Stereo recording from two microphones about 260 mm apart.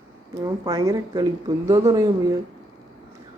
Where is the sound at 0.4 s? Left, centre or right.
Centre.